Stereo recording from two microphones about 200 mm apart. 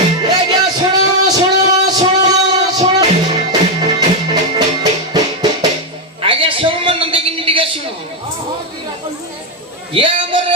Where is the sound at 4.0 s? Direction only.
20° right (ahead or behind).